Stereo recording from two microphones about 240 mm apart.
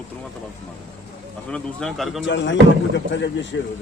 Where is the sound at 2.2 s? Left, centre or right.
Left.